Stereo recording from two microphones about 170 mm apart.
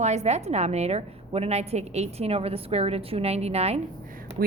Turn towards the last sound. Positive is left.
turn(degrees=-60)  # may be behind; listen again after turning